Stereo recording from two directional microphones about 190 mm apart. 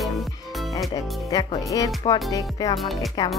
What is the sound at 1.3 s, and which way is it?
Speech, 20° left (ahead or behind).